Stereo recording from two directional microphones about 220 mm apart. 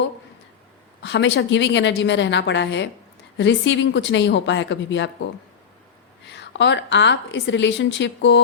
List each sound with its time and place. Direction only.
1.0 s a woman's voice: 50° left (ahead or behind)